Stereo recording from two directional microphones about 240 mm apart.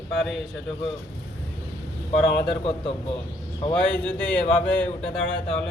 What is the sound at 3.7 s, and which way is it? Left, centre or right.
A man's voice, centre.